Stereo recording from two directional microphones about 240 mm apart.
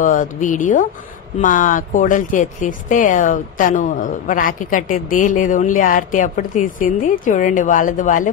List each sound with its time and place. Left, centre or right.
0.0 s speech: left